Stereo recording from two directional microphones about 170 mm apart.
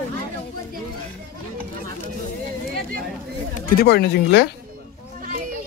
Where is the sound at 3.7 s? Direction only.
65° left (ahead or behind).